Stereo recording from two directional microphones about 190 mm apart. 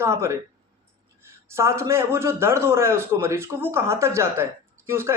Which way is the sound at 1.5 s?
15° right (ahead or behind).